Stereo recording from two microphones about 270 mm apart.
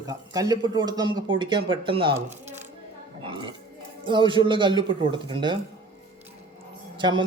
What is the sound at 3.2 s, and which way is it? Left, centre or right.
A man's voice, centre.